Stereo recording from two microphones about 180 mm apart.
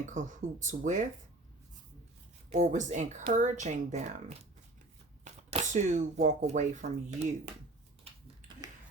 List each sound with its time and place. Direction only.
0.0 s speech: 45° right (ahead or behind)
2.5 s speech: 40° right (ahead or behind)